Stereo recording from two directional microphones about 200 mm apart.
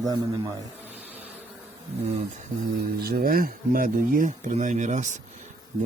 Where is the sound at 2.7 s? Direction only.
50° right (ahead or behind).